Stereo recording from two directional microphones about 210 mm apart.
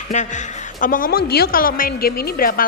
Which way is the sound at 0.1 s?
35° left (ahead or behind).